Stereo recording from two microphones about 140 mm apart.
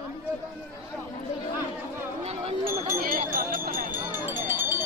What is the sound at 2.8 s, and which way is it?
Music, 75° right (ahead or behind).